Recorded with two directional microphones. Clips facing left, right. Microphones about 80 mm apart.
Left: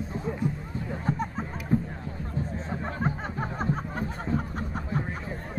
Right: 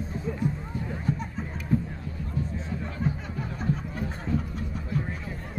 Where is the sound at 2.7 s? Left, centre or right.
Left.